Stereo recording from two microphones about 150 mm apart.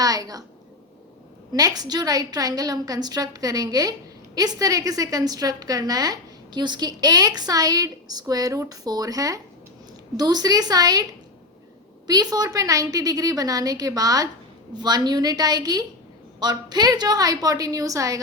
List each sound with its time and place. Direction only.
0.0 s a woman's voice: 25° right (ahead or behind)
1.5 s a woman's voice: 25° right (ahead or behind)
12.0 s a woman's voice: 25° right (ahead or behind)